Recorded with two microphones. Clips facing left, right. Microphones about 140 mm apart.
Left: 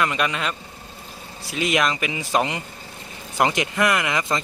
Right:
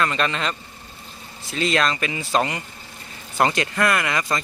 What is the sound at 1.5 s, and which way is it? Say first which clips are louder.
Speech: even; 15° left (ahead or behind).